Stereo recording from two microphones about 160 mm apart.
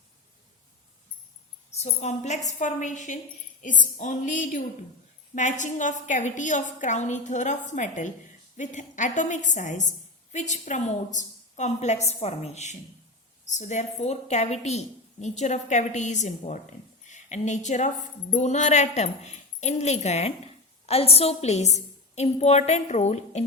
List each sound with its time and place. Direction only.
1.8 s a woman's voice: 45° left (ahead or behind)